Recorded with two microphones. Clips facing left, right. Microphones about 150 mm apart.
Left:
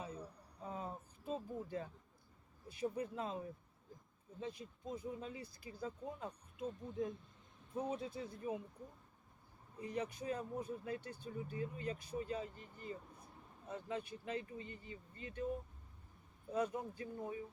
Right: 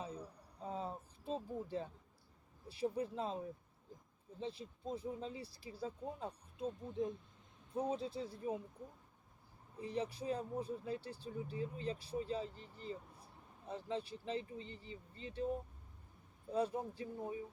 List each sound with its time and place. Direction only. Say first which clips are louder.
0.6 s a sound: right 2 dB; 30° right (ahead or behind)
2.6 s speech: right 2 dB; 30° right (ahead or behind)
4.4 s speech: right 2 dB; 30° right (ahead or behind)
9.8 s speech: right 1 dB; 30° right (ahead or behind)
13.7 s speech: right 2 dB; 30° right (ahead or behind)
16.5 s speech: right 1 dB; 30° right (ahead or behind)